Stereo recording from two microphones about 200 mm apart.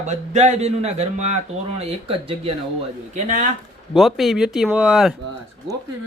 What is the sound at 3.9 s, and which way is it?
Speech, centre (ahead or behind).